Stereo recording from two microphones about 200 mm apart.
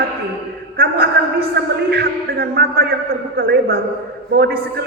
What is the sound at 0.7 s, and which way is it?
A woman's voice, 50° right (ahead or behind).